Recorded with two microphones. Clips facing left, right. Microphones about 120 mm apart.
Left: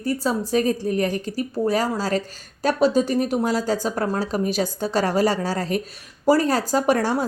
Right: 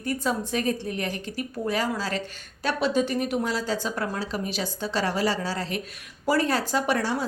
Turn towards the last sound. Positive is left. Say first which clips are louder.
# left 5 dB
turn(degrees=45)  # may be behind; listen again after turning